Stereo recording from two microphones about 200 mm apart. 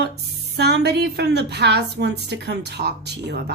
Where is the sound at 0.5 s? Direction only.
55° right (ahead or behind).